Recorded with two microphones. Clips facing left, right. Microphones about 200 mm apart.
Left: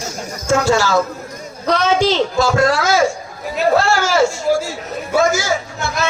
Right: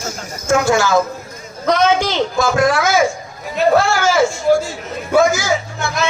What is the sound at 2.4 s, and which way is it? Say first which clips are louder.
Speech: right 2 dB; 20° right (ahead or behind).